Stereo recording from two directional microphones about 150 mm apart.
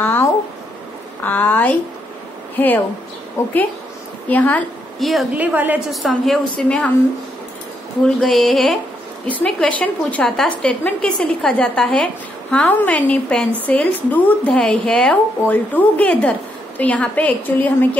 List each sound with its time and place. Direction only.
0.0 s a sound: 15° left (ahead or behind)
1.2 s a woman's voice: 10° left (ahead or behind)
5.3 s a woman's voice: 10° right (ahead or behind)
5.9 s a woman's voice: centre (ahead or behind)
8.2 s a woman's voice: centre (ahead or behind)